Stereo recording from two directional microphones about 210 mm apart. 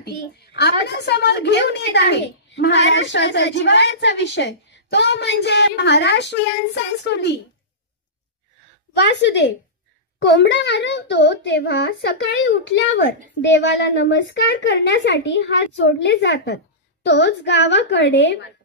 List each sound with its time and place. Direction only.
0.0 s a woman's voice: 50° left (ahead or behind)
9.1 s a woman's voice: 55° left (ahead or behind)